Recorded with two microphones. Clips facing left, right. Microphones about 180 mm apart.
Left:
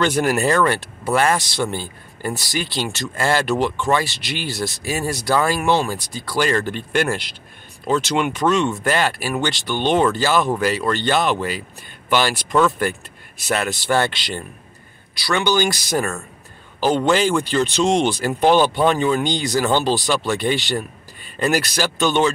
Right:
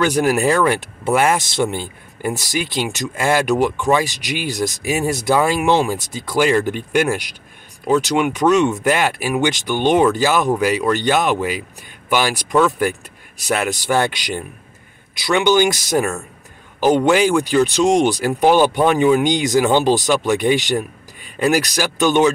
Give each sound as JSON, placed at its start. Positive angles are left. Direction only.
{"t": 0.0, "sound": "speech", "side_deg": -10}